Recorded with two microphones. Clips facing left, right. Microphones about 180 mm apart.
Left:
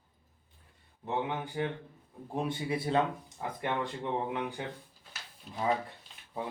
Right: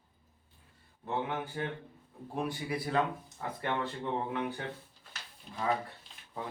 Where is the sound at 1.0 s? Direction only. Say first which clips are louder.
Left 1 dB; 20° left (ahead or behind).